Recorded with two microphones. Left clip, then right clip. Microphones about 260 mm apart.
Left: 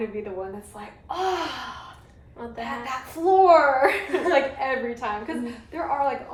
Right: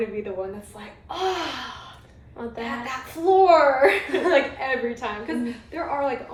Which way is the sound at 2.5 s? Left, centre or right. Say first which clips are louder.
Even; left.